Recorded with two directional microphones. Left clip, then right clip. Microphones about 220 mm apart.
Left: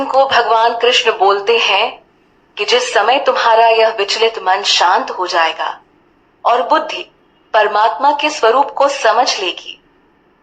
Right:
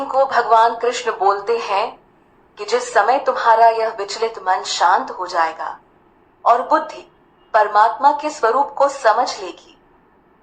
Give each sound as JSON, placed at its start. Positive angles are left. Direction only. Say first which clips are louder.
{"t": 0.0, "sound": "a woman's voice", "louder": "left 5 dB", "side_deg": 25}